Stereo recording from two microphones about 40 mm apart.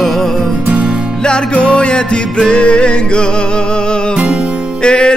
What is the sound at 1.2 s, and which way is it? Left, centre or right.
Music, left.